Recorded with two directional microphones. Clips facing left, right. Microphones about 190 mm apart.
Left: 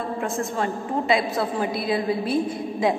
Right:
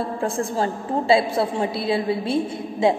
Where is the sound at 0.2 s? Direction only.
30° right (ahead or behind).